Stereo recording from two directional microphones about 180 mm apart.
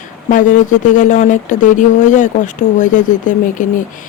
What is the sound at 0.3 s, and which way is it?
Speech, 45° left (ahead or behind).